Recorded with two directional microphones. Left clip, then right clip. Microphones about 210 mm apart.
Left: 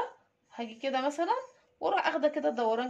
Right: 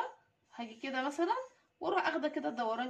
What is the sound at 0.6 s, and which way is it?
Speech, 50° left (ahead or behind).